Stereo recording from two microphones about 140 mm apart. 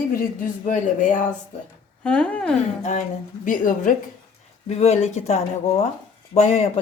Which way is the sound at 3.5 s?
70° left (ahead or behind).